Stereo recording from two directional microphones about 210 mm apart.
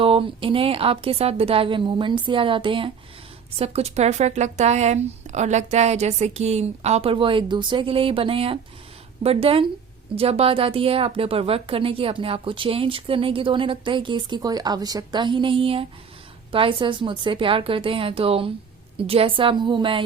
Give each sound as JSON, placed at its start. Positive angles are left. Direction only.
{"t": 0.0, "sound": "a woman's voice", "side_deg": -25}